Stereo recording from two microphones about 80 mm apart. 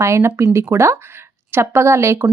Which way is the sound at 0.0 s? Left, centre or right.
Right.